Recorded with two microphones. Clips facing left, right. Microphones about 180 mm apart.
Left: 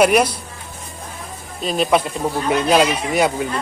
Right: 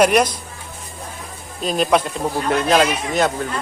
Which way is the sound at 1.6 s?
Centre (ahead or behind).